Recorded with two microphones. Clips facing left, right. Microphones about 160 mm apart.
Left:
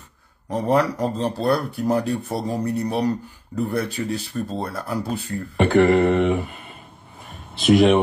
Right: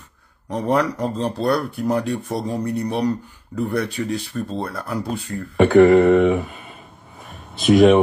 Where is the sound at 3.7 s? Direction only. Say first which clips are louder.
Right 3 dB; 35° left (ahead or behind).